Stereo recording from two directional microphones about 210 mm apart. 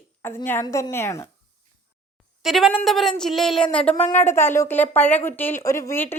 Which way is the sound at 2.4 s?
Centre (ahead or behind).